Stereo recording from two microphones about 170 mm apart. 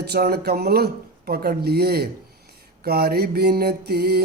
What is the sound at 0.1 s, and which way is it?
Mantra, 70° right (ahead or behind).